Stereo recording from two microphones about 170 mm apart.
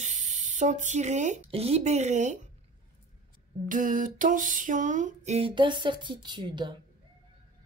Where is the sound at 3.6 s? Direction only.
50° right (ahead or behind); by 6.8 s 25° right (ahead or behind).